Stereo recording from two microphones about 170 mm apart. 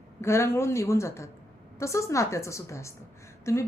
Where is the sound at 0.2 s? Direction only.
15° left (ahead or behind).